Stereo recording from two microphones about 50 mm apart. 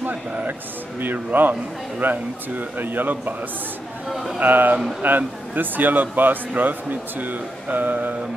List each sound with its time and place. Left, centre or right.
0.1 s speech: right
4.1 s a man's voice: centre
4.4 s speech: right